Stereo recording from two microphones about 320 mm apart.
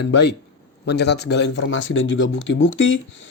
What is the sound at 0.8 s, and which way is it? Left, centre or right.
Speech, left.